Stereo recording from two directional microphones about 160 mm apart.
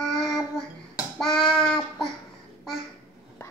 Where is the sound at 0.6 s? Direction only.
5° left (ahead or behind).